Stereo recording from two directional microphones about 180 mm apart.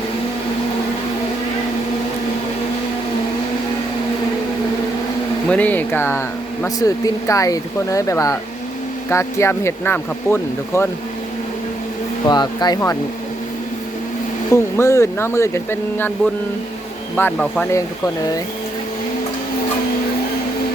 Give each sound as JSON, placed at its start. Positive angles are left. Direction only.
{"t": 5.5, "sound": "speech", "side_deg": 10}
{"t": 12.2, "sound": "speech", "side_deg": 25}
{"t": 14.5, "sound": "speech", "side_deg": 15}